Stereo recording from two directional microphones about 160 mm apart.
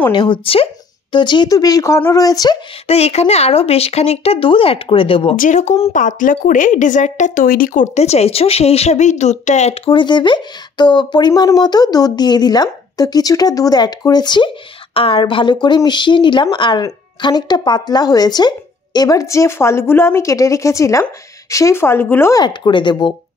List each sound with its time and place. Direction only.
0.1 s a woman's voice: 30° left (ahead or behind)
2.9 s a woman's voice: 40° left (ahead or behind)
5.3 s a woman's voice: 55° left (ahead or behind); by 22.4 s 15° left (ahead or behind)
22.4 s speech: 30° left (ahead or behind)